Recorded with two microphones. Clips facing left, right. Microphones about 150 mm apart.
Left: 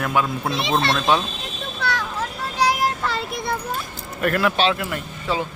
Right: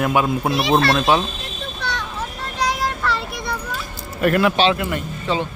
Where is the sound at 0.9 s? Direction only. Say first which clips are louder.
Right 3 dB; 5° right (ahead or behind).